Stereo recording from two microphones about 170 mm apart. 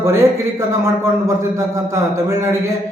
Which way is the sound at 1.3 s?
15° right (ahead or behind).